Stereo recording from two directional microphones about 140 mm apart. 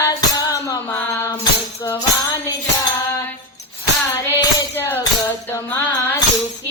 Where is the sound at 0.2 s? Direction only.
25° left (ahead or behind).